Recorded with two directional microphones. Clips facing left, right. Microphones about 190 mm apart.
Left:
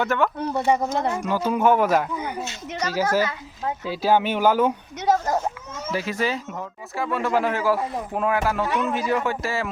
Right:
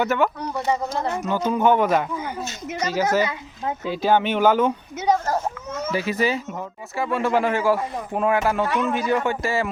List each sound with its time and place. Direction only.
0.0 s speech: 5° right (ahead or behind)
0.3 s speech: 25° left (ahead or behind)
0.9 s speech: 15° left (ahead or behind)
5.9 s speech: centre (ahead or behind)